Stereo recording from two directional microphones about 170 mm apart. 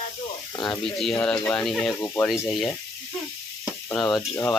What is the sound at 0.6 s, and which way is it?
Speech, centre (ahead or behind).